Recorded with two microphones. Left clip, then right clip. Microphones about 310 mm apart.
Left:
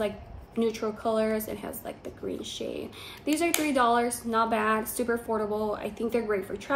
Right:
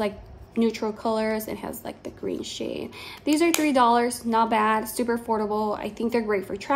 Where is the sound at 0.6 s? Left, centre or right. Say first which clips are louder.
Right 3 dB; right.